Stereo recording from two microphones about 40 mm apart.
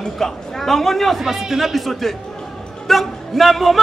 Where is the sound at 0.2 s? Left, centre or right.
Centre.